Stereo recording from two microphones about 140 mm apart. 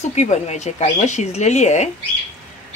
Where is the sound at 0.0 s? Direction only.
55° left (ahead or behind).